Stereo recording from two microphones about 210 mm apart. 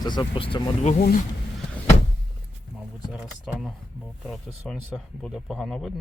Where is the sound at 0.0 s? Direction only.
20° left (ahead or behind).